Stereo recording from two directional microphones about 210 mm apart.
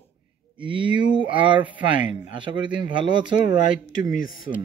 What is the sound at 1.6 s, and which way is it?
Speech, 5° right (ahead or behind).